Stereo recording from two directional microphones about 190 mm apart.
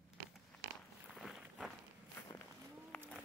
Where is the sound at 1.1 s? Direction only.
5° right (ahead or behind).